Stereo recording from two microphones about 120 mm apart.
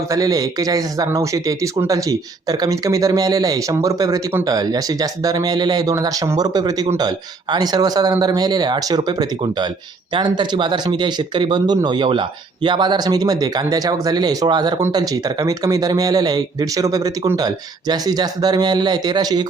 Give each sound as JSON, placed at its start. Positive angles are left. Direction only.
{"t": 0.1, "sound": "speech", "side_deg": -30}